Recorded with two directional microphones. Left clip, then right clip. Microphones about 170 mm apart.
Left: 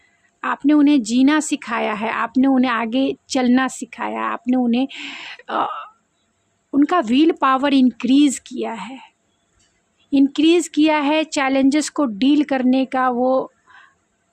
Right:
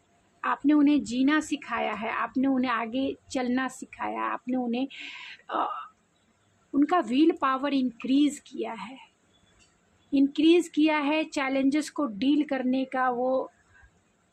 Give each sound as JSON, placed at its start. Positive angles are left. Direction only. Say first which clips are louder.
{"t": 0.4, "sound": "speech", "louder": "left 7 dB", "side_deg": 40}
{"t": 10.1, "sound": "speech", "louder": "left 7 dB", "side_deg": 40}